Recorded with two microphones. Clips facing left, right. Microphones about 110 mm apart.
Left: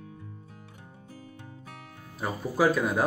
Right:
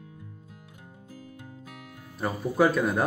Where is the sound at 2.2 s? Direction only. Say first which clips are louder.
Right 3 dB; centre (ahead or behind).